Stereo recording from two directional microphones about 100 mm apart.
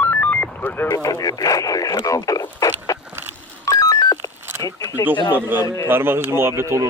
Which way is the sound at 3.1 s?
20° right (ahead or behind).